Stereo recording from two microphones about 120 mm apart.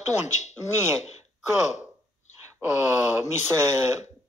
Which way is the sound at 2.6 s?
15° right (ahead or behind).